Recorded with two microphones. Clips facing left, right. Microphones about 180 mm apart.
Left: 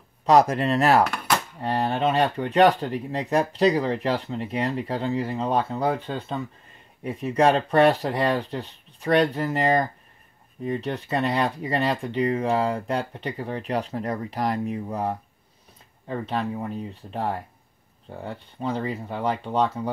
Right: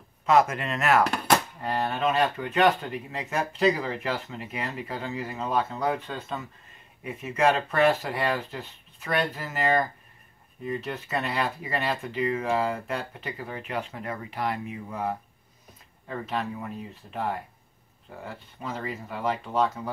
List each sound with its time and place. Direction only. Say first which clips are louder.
0.2 s speech: left 4 dB; 35° left (ahead or behind)
16.3 s speech: left 3 dB; 35° left (ahead or behind)